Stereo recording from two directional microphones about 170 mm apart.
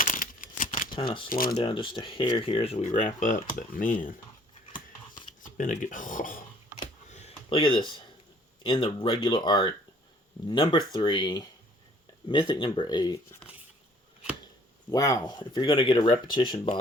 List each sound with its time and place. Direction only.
0.0 s a sound: 50° left (ahead or behind)
0.9 s speech: 30° left (ahead or behind); by 4.1 s 55° left (ahead or behind)
5.5 s speech: 50° left (ahead or behind)
7.1 s a sound: 40° left (ahead or behind)
8.6 s speech: 30° left (ahead or behind)
14.8 s speech: 20° left (ahead or behind)